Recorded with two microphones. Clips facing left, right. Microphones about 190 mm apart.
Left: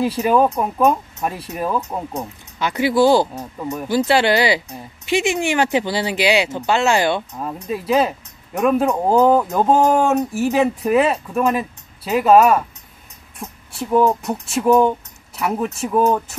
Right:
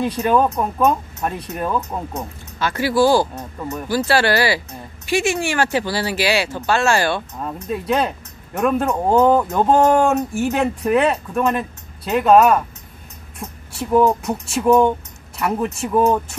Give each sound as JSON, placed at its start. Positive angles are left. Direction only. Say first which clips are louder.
{"t": 0.0, "sound": "speech", "louder": "left 1 dB", "side_deg": 5}
{"t": 2.1, "sound": "speech", "louder": "left 1 dB", "side_deg": 15}
{"t": 7.3, "sound": "speech", "louder": "even", "side_deg": 5}